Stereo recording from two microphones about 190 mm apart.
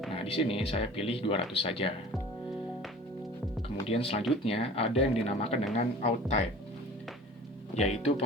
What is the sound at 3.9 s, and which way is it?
Speech, 30° left (ahead or behind).